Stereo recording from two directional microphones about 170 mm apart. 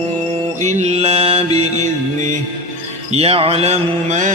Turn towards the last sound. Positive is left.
turn(degrees=-45)  # may be behind; listen again after turning